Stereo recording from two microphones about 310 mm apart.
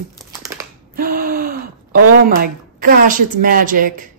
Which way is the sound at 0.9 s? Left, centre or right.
Right.